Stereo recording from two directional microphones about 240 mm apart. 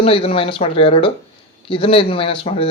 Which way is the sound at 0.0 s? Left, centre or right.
Left.